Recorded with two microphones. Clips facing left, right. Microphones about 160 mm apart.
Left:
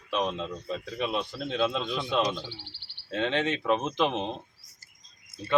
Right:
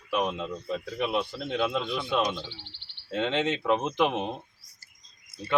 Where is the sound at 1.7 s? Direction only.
20° left (ahead or behind).